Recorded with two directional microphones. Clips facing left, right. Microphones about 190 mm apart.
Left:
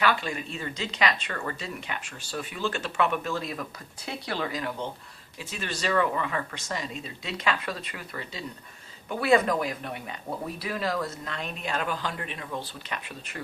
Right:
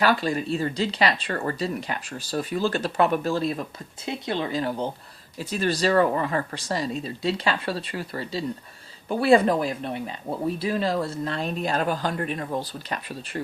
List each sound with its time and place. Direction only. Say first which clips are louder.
0.0 s speech: right 5 dB; 35° right (ahead or behind)